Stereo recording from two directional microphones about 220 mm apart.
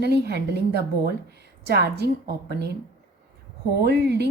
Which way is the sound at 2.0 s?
45° right (ahead or behind).